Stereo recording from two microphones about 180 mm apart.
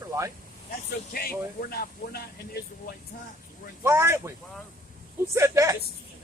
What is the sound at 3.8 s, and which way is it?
Speech, 15° right (ahead or behind).